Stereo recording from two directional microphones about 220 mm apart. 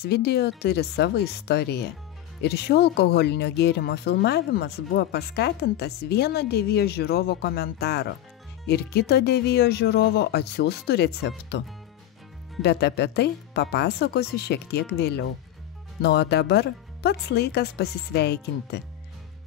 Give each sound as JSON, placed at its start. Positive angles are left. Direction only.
{"t": 0.0, "sound": "speech", "side_deg": 45}
{"t": 12.6, "sound": "speech", "side_deg": 50}